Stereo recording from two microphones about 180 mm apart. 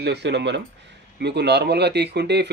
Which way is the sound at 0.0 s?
70° right (ahead or behind).